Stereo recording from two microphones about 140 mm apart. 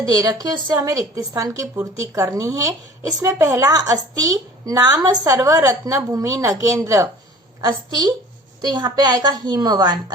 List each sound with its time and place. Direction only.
0.0 s a woman's voice: 25° right (ahead or behind)